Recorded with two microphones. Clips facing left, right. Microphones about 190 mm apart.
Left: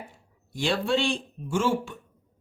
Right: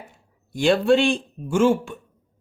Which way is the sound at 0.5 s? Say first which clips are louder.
Right 8 dB; 55° right (ahead or behind).